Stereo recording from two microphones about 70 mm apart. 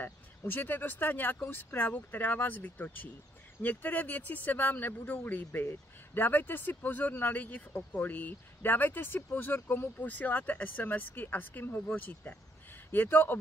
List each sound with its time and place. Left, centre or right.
0.0 s speech: left